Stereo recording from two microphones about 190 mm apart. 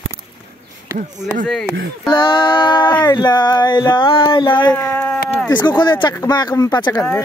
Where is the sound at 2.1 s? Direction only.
25° left (ahead or behind).